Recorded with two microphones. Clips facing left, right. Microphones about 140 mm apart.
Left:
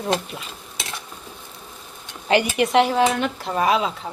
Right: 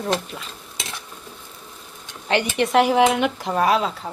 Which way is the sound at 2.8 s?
15° right (ahead or behind).